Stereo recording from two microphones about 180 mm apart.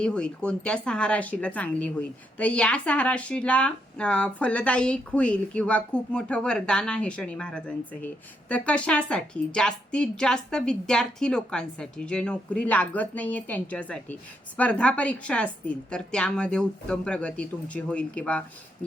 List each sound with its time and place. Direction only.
0.0 s speech: 5° left (ahead or behind)